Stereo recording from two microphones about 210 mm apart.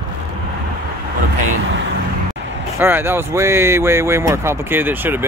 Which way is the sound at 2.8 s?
10° right (ahead or behind).